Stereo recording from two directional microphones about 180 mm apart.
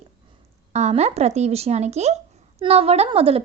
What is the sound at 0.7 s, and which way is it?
A woman's voice, 35° right (ahead or behind).